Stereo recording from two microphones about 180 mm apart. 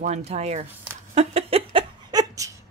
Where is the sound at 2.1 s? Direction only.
20° right (ahead or behind).